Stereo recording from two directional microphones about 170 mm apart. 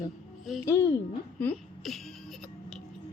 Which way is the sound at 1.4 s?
5° left (ahead or behind).